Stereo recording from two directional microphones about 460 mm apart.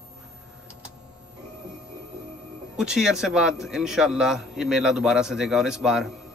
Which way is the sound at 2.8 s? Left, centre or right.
Centre.